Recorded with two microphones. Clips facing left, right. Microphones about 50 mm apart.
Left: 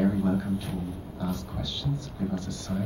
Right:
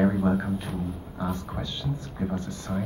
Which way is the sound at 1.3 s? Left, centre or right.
Right.